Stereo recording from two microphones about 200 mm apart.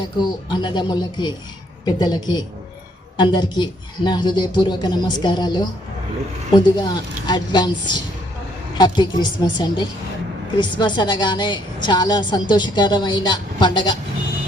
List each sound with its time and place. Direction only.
0.0 s a woman's voice: 20° left (ahead or behind)